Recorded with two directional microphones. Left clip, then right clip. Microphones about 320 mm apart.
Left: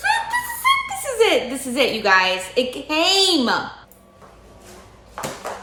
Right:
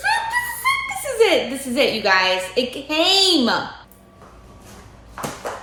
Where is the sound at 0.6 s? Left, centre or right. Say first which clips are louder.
Left 2 dB; centre.